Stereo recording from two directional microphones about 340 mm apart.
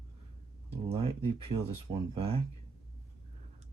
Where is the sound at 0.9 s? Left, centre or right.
Centre.